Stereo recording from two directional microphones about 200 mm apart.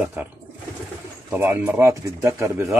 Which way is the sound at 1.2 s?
10° right (ahead or behind).